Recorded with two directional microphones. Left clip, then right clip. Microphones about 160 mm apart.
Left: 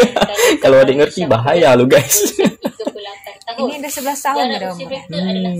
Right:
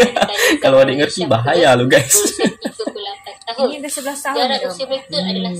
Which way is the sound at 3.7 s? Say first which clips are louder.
Left 3 dB; 40° left (ahead or behind).